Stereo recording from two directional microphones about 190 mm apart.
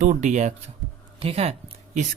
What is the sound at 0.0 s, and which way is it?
Speech, 40° right (ahead or behind).